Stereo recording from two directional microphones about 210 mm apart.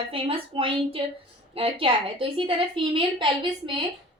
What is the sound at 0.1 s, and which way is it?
A woman's voice, 25° right (ahead or behind).